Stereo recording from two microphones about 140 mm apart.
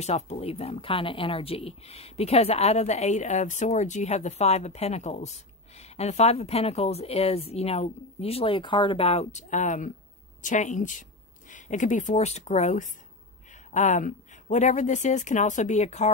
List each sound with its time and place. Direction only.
0.0 s speech: 50° left (ahead or behind)